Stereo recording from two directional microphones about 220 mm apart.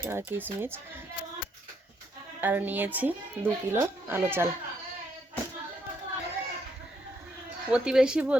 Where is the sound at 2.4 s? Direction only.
10° right (ahead or behind).